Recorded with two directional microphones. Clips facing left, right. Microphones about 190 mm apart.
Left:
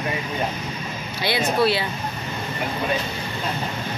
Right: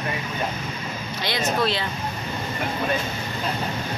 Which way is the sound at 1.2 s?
10° left (ahead or behind).